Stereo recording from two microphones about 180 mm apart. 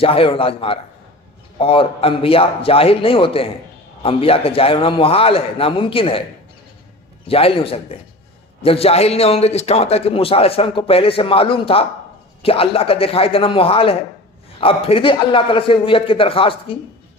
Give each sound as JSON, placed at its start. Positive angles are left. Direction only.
{"t": 0.0, "sound": "a man's voice", "side_deg": 30}
{"t": 7.3, "sound": "a man's voice", "side_deg": 30}